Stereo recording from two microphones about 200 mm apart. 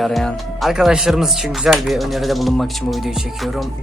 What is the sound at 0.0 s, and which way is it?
Speech, centre (ahead or behind).